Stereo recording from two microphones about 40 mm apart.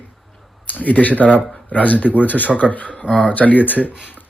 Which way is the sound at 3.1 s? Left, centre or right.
Left.